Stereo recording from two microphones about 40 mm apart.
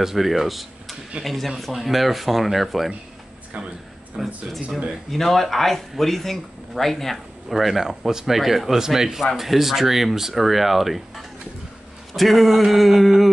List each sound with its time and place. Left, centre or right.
0.0 s speech: centre
3.5 s speech: right
4.2 s a man's voice: centre